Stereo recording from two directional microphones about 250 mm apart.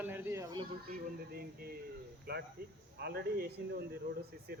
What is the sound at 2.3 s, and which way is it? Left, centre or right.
Speech, right.